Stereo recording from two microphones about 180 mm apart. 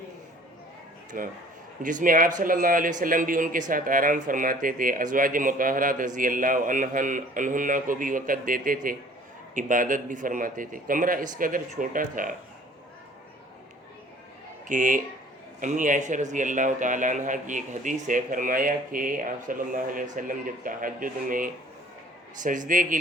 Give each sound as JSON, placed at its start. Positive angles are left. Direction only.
{"t": 1.1, "sound": "speech", "side_deg": -50}
{"t": 14.7, "sound": "speech", "side_deg": -45}